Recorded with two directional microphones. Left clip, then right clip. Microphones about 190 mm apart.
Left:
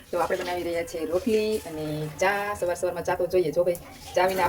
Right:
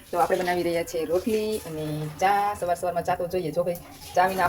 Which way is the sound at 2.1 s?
5° left (ahead or behind).